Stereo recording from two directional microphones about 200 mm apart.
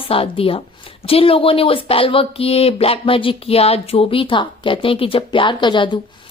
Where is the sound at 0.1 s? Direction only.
25° left (ahead or behind).